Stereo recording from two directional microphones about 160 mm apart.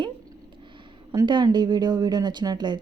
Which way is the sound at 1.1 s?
30° right (ahead or behind).